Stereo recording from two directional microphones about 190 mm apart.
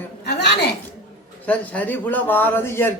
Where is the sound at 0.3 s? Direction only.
60° left (ahead or behind).